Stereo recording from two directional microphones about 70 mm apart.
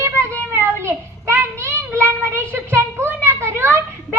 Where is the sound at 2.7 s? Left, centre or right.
Right.